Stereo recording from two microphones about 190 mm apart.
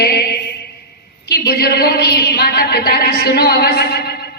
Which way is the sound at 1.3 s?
55° left (ahead or behind).